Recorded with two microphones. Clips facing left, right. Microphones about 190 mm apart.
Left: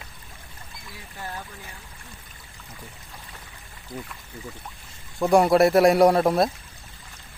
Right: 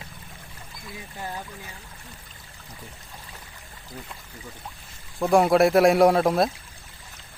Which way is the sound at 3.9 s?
15° left (ahead or behind).